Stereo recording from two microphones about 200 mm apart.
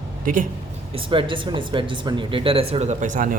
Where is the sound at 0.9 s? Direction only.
25° right (ahead or behind).